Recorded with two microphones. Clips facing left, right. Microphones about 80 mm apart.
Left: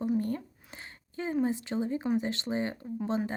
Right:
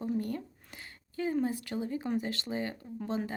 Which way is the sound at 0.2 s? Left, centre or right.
Left.